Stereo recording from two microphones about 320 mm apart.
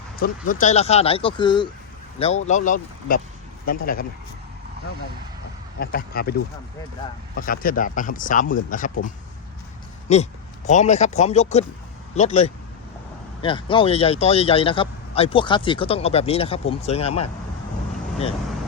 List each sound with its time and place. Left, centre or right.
0.2 s speech: left
5.8 s speech: left
7.3 s speech: left
10.1 s speech: left